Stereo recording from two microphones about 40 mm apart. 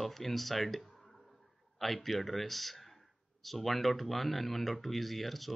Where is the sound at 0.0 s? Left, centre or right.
Centre.